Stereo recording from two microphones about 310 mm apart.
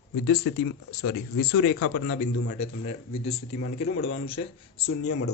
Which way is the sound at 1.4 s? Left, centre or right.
Left.